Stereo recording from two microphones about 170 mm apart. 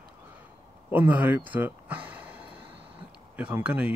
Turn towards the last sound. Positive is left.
turn(degrees=-10)  # may be behind; listen again after turning